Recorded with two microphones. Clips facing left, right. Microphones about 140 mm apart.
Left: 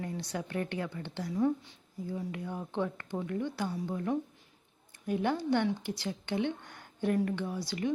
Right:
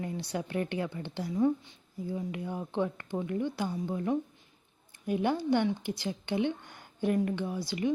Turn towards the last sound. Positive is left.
turn(degrees=-5)  # may be behind; listen again after turning